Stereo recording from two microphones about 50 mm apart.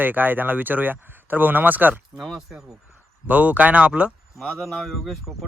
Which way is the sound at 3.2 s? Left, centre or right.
Right.